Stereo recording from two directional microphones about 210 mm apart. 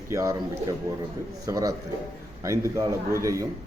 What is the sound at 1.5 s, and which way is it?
A man's voice, 15° right (ahead or behind).